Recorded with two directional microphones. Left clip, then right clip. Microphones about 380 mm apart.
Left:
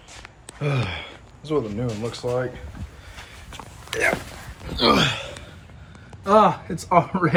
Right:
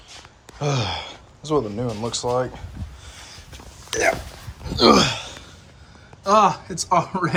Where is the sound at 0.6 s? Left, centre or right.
Centre.